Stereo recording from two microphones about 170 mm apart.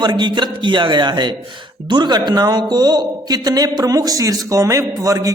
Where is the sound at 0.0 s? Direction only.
25° right (ahead or behind).